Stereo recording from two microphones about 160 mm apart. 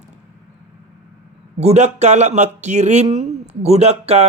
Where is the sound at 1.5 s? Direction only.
45° right (ahead or behind).